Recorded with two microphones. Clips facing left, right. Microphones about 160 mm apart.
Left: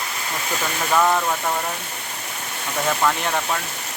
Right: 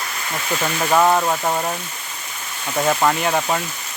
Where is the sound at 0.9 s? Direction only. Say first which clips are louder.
Right 3 dB; 20° right (ahead or behind).